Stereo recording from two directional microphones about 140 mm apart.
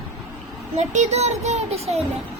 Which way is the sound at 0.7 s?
55° right (ahead or behind).